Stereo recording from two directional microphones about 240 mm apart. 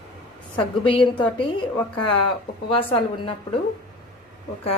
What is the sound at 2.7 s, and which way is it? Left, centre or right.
Speech, left.